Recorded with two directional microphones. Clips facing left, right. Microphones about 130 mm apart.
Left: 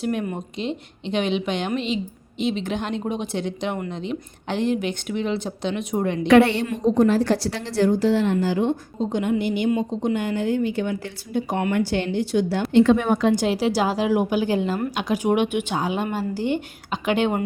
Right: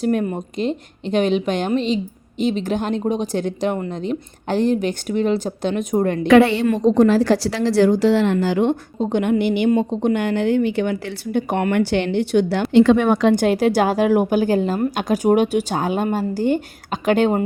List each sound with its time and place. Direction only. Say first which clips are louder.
0.0 s speech: right 5 dB; 40° right (ahead or behind)
6.7 s a woman's voice: right 4 dB; 90° right; by 12.6 s 70° right (ahead or behind)
12.7 s a woman's voice: right 3 dB; 90° right
13.3 s speech: right 5 dB; 55° right (ahead or behind)